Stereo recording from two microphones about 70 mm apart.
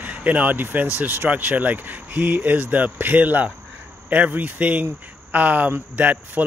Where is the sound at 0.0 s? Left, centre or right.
Right.